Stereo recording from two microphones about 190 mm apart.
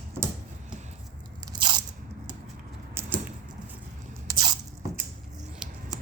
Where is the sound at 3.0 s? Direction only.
10° right (ahead or behind).